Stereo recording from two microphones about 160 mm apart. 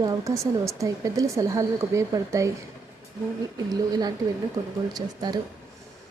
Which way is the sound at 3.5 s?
25° right (ahead or behind).